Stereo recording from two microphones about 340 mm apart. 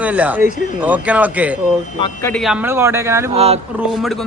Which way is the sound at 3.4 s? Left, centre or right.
Centre.